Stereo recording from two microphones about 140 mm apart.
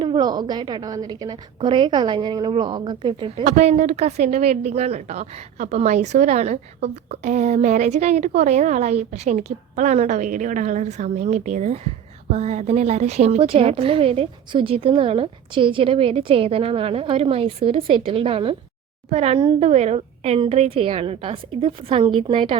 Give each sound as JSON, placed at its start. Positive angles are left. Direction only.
{"t": 0.0, "sound": "speech", "side_deg": -30}
{"t": 3.4, "sound": "a woman's voice", "side_deg": -55}